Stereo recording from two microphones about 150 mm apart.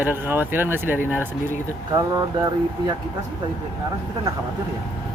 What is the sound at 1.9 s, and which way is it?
Speech, 25° right (ahead or behind).